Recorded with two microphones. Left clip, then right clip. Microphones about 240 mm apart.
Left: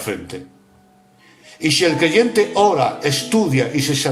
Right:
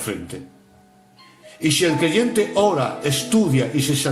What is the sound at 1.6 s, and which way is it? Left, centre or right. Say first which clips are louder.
Speech: left 3 dB; left.